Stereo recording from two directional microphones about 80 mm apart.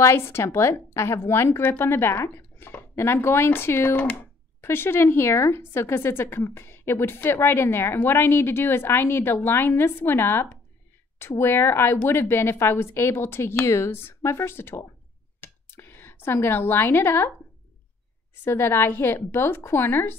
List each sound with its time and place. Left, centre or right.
0.0 s a woman's voice: left
15.4 s a sound: left
18.3 s a woman's voice: left